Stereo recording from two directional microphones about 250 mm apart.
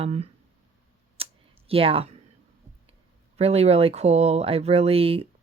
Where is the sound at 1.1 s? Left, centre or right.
Right.